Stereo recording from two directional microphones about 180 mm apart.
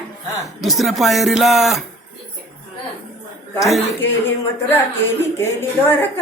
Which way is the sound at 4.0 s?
10° left (ahead or behind).